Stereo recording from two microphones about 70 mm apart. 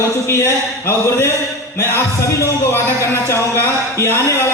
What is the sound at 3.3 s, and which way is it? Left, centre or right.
Speech, left.